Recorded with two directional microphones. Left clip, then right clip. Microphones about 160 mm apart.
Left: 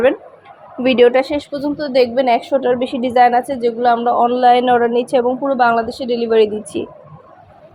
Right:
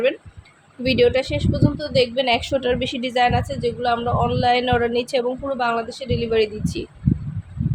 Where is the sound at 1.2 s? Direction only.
20° left (ahead or behind).